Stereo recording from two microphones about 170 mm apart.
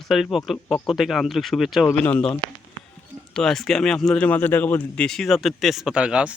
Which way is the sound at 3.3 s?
5° left (ahead or behind).